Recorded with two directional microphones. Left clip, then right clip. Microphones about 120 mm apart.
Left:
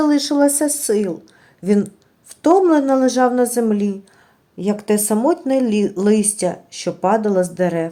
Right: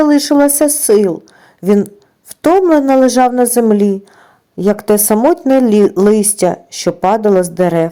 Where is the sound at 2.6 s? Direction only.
40° right (ahead or behind).